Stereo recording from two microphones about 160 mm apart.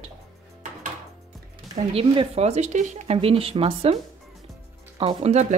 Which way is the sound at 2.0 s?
40° right (ahead or behind).